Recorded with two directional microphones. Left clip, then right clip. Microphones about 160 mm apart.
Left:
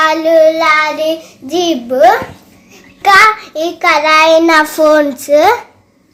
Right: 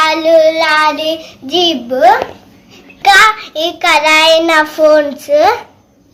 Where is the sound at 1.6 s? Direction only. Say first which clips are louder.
Left 1 dB; 55° left (ahead or behind).